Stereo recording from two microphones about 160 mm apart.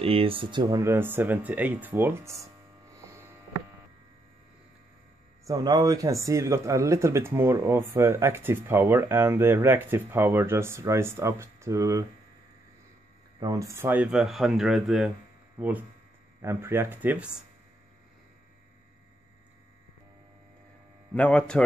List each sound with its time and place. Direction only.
0.0 s speech: 35° right (ahead or behind); by 2.3 s 15° right (ahead or behind)
5.5 s speech: 25° right (ahead or behind)
13.4 s speech: 20° right (ahead or behind); by 15.1 s 5° right (ahead or behind)
16.3 s speech: 15° right (ahead or behind)
21.1 s a man's voice: 5° left (ahead or behind)